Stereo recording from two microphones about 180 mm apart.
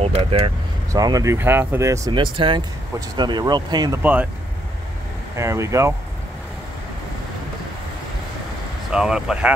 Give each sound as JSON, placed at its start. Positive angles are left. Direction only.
{"t": 0.0, "sound": "speech", "side_deg": -30}
{"t": 0.9, "sound": "speech", "side_deg": -20}
{"t": 4.0, "sound": "speech", "side_deg": -10}
{"t": 5.3, "sound": "speech", "side_deg": -15}
{"t": 8.9, "sound": "speech", "side_deg": -5}